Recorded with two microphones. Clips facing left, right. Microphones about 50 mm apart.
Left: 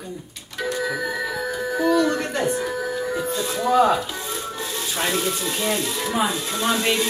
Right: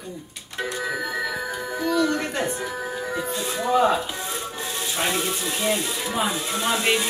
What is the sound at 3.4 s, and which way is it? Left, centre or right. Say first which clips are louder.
Speech: left 2 dB; centre.